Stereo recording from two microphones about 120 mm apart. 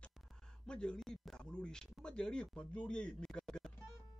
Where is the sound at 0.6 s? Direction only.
5° left (ahead or behind).